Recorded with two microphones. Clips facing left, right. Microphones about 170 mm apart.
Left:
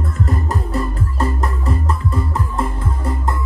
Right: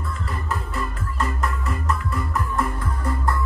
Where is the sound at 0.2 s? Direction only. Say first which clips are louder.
Left 9 dB; 40° left (ahead or behind).